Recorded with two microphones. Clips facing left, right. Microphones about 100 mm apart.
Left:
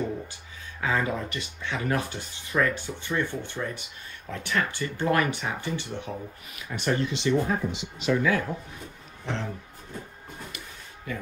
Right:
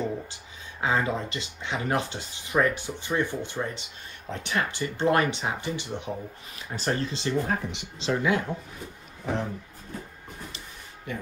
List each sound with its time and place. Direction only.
0.3 s speech: 20° right (ahead or behind)
6.5 s speech: 35° right (ahead or behind)
7.4 s speech: 55° right (ahead or behind)
8.0 s speech: 25° right (ahead or behind)
9.2 s music: 15° right (ahead or behind)